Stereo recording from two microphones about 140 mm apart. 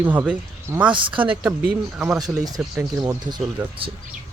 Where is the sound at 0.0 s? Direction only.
15° right (ahead or behind).